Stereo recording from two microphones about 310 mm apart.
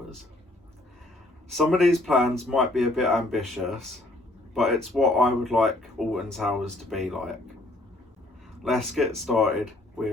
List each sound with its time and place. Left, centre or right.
1.5 s speech: centre
8.6 s speech: centre